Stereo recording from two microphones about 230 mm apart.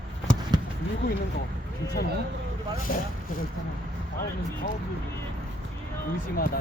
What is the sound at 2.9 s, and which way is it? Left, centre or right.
Speech, left.